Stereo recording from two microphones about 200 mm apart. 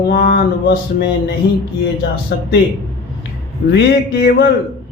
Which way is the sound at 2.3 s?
55° left (ahead or behind).